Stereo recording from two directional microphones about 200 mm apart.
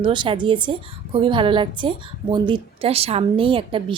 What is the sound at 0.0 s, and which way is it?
A woman's voice, 25° right (ahead or behind).